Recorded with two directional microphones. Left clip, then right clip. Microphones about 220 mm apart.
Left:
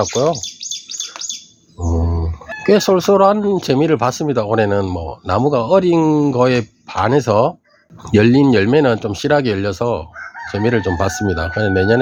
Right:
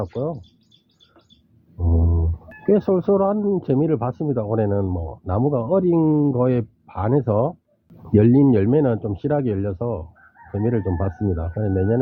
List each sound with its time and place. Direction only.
0.0 s speech: 35° left (ahead or behind)
1.8 s mantra: 20° left (ahead or behind)
2.6 s speech: 5° left (ahead or behind)